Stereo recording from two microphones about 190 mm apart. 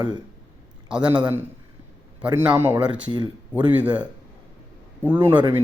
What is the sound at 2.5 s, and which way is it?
Speech, 10° right (ahead or behind).